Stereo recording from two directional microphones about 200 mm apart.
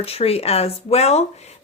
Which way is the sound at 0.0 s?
30° left (ahead or behind).